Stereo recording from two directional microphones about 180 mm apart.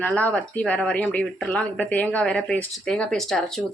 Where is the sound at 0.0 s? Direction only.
10° left (ahead or behind).